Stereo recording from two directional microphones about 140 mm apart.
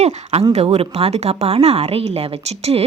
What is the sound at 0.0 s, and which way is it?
Speech, 50° right (ahead or behind).